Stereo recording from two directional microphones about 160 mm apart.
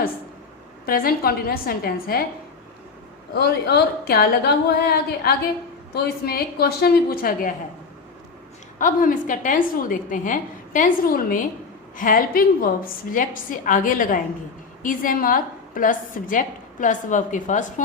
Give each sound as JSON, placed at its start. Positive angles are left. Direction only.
{"t": 0.9, "sound": "a woman's voice", "side_deg": 65}
{"t": 3.3, "sound": "a woman's voice", "side_deg": 90}
{"t": 8.8, "sound": "a woman's voice", "side_deg": 55}